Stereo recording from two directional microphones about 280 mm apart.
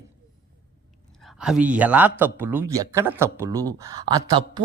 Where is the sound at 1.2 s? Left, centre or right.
Centre.